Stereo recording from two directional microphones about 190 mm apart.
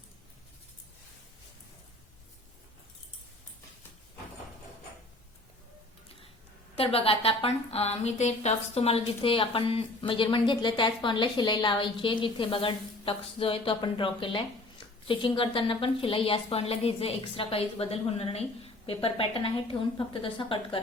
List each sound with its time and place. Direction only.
6.7 s a woman's voice: 30° left (ahead or behind)